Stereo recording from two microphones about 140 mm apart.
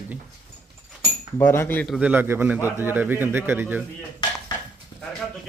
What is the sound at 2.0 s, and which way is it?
A man's voice, 10° right (ahead or behind).